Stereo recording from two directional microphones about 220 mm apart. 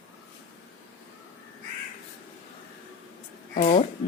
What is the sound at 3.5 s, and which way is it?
Music, 30° left (ahead or behind).